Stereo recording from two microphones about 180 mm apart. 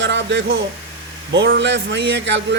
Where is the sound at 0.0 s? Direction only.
85° right.